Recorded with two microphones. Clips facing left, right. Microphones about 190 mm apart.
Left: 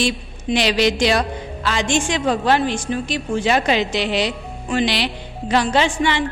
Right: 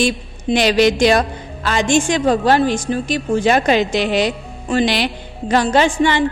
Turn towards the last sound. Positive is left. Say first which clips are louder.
# right 4 dB
turn(degrees=-45)  # may be behind; listen again after turning